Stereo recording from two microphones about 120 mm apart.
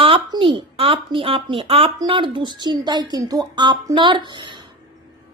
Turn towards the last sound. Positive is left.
turn(degrees=-40)  # may be behind; listen again after turning